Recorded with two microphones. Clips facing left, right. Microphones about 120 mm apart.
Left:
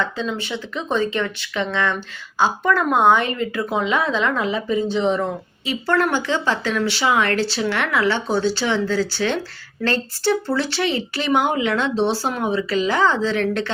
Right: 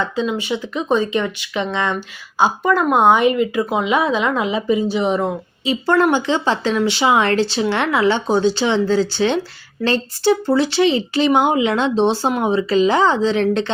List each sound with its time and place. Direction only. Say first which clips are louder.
0.0 s speech: right 4 dB; 15° right (ahead or behind)